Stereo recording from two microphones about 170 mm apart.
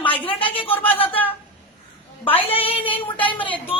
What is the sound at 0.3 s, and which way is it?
Speech, 30° left (ahead or behind).